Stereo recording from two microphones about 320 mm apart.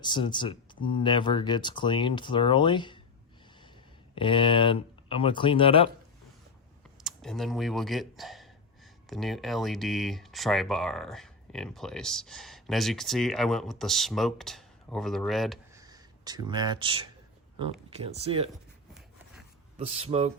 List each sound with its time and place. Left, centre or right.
0.0 s speech: centre
4.1 s speech: centre
7.0 s speech: centre
15.8 s speech: centre
19.8 s speech: centre